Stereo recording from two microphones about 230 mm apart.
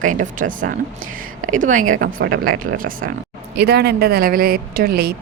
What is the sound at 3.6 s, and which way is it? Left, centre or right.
A woman's voice, right.